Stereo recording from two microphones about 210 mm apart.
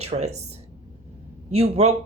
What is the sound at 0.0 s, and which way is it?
Speech, 30° right (ahead or behind).